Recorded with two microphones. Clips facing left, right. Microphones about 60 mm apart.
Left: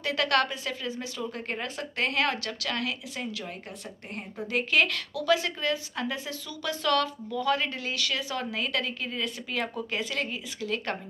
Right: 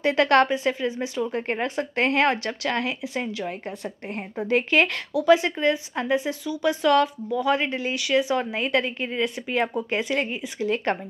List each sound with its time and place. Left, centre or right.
0.0 s speech: right